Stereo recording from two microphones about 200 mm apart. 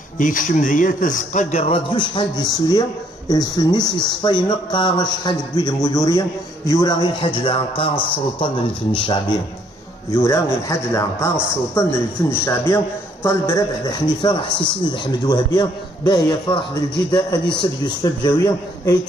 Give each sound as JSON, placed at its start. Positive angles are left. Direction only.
{"t": 0.2, "sound": "a man's voice", "side_deg": 40}
{"t": 8.9, "sound": "a man's voice", "side_deg": 25}
{"t": 10.1, "sound": "a man's voice", "side_deg": 15}